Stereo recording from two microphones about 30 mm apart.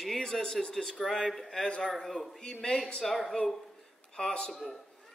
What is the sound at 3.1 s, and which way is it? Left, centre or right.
Speech, centre.